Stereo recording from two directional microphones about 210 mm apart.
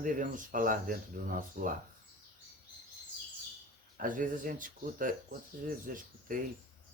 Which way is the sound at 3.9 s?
40° right (ahead or behind).